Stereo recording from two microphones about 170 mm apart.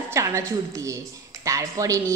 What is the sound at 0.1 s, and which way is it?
A woman's voice, 15° right (ahead or behind).